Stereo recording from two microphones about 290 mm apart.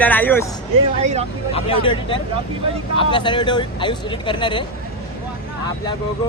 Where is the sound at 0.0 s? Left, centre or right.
Centre.